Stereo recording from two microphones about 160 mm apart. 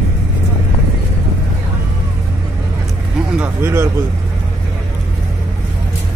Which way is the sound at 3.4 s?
15° right (ahead or behind).